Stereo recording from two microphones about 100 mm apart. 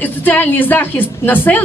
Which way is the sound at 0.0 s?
20° left (ahead or behind).